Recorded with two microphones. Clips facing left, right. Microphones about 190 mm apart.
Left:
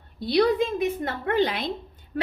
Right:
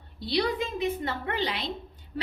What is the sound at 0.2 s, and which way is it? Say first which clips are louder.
A woman's voice: left 7 dB; 50° left (ahead or behind).